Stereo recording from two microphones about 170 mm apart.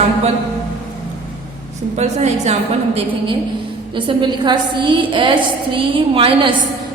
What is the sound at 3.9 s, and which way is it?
A woman's voice, 25° right (ahead or behind).